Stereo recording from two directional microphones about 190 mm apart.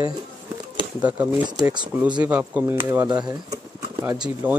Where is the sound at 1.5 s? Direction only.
20° right (ahead or behind).